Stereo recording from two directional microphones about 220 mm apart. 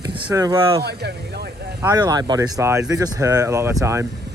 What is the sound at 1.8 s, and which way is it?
Speech, 15° right (ahead or behind).